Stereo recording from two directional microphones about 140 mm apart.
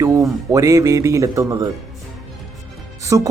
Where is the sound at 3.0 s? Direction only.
20° right (ahead or behind).